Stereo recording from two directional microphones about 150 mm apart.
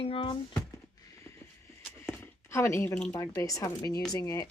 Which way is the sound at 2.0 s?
10° left (ahead or behind).